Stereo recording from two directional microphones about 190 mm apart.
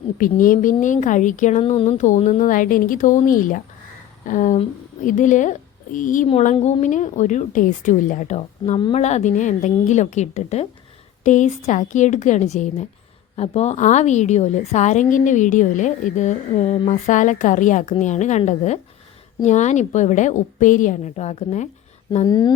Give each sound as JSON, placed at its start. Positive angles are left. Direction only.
{"t": 0.2, "sound": "a woman's voice", "side_deg": 45}
{"t": 22.1, "sound": "speech", "side_deg": 20}